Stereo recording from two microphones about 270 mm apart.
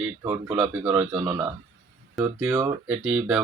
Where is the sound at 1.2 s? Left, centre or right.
Centre.